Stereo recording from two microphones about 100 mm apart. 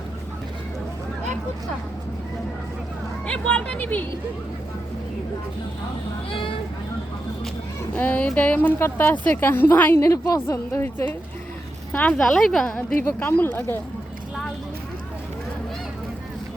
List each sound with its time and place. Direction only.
3.2 s a woman's voice: 10° left (ahead or behind)
7.9 s a woman's voice: 20° left (ahead or behind)
10.0 s a woman's voice: 30° left (ahead or behind); by 13.0 s 10° left (ahead or behind)
13.0 s a woman's voice: 20° left (ahead or behind)